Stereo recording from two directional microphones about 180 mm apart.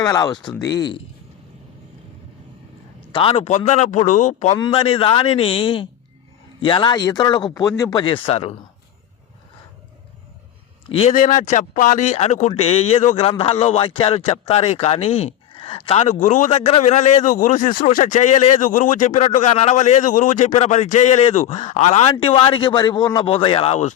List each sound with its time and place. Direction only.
0.0 s a man's voice: 20° left (ahead or behind)
3.1 s a man's voice: 30° left (ahead or behind)
4.5 s a man's voice: 25° left (ahead or behind)
10.8 s a man's voice: 35° left (ahead or behind)